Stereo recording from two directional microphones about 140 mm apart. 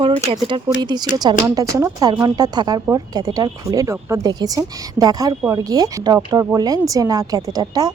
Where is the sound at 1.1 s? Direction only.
25° right (ahead or behind).